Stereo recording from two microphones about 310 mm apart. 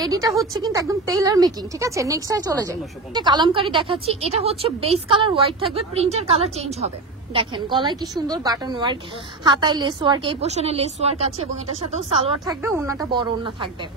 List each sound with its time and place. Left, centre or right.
0.0 s speech: centre